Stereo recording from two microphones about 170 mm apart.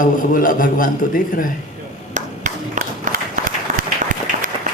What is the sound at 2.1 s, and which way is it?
Clapping, 45° right (ahead or behind).